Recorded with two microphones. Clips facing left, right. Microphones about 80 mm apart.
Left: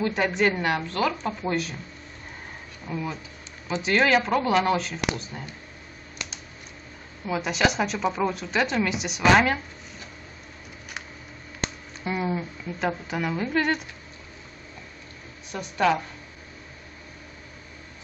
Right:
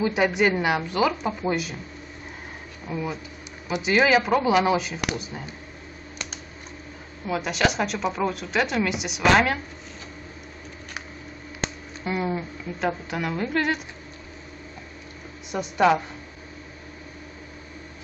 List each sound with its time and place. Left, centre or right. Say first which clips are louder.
0.0 s speech: right 2 dB; centre
2.9 s speech: right 2 dB; centre
7.2 s speech: even; centre
12.0 s speech: right 1 dB; centre
15.5 s speech: right 3 dB; centre